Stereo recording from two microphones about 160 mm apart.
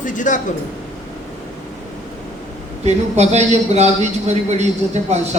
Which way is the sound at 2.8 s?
45° right (ahead or behind).